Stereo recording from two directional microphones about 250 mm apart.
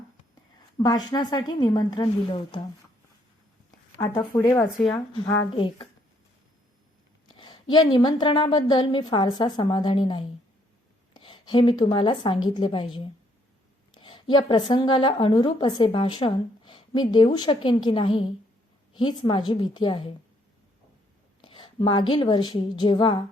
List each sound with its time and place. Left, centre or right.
0.8 s a woman's voice: centre
3.9 s a woman's voice: centre
5.5 s a woman's voice: left
7.3 s a sound: centre
7.9 s a woman's voice: centre
21.4 s a sound: centre
22.1 s a woman's voice: centre